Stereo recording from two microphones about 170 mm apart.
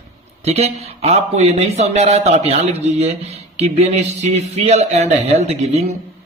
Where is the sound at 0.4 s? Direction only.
40° right (ahead or behind).